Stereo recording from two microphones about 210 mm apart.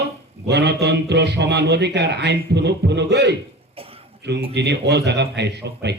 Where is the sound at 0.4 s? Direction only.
55° right (ahead or behind).